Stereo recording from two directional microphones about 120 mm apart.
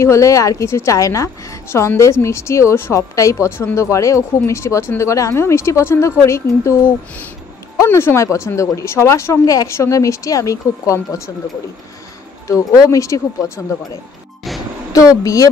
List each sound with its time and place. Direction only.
0.0 s a woman's voice: 25° left (ahead or behind)
12.8 s a woman's voice: 25° left (ahead or behind)
14.9 s a woman's voice: 30° left (ahead or behind)